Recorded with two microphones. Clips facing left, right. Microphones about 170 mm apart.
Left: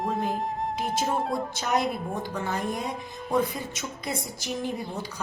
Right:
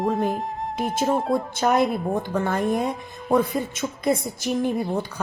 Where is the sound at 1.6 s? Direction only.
55° right (ahead or behind).